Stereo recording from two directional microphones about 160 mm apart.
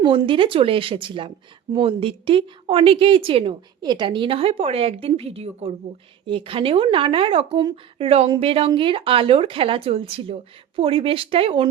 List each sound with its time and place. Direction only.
0.0 s a woman's voice: 30° right (ahead or behind)